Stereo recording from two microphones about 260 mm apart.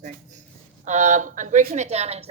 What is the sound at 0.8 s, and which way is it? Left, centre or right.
A woman's voice, right.